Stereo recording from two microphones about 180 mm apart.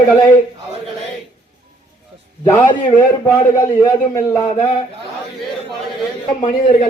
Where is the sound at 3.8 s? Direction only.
20° left (ahead or behind).